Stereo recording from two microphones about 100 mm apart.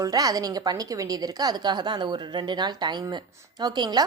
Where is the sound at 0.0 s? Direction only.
40° right (ahead or behind).